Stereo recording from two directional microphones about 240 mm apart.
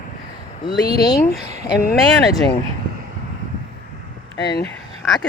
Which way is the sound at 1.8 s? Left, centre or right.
Left.